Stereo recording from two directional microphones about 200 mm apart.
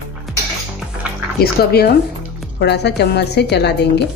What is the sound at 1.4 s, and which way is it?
A woman's voice, 55° left (ahead or behind).